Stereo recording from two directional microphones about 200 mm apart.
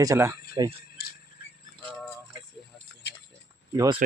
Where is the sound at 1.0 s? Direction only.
50° left (ahead or behind).